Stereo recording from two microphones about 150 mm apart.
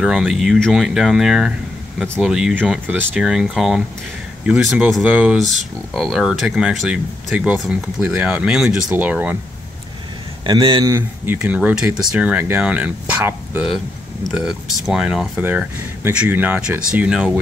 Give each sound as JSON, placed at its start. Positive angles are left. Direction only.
{"t": 0.0, "sound": "speech", "side_deg": -5}
{"t": 10.4, "sound": "a man's voice", "side_deg": -35}
{"t": 10.9, "sound": "speech", "side_deg": -15}